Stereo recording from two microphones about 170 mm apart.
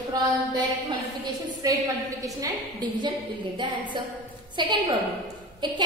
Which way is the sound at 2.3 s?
25° right (ahead or behind).